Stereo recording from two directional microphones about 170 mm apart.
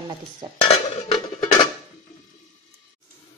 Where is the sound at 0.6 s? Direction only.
30° left (ahead or behind).